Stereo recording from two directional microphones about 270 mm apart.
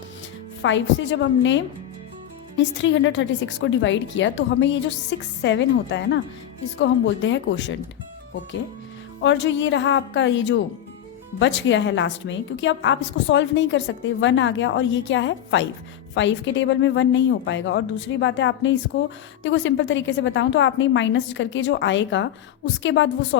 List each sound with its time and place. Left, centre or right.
0.6 s a woman's voice: left
9.2 s a woman's voice: left